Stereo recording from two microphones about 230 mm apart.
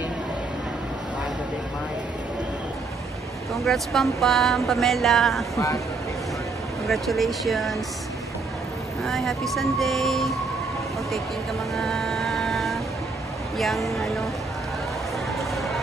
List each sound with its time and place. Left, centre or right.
3.6 s speech: centre
6.9 s speech: centre
9.0 s speech: centre
11.7 s music: centre
13.6 s speech: centre
15.3 s a sound: centre